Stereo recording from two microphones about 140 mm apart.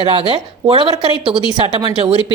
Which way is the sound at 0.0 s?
40° right (ahead or behind).